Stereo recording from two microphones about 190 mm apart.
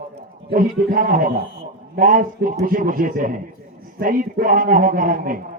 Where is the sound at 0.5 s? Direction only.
45° right (ahead or behind).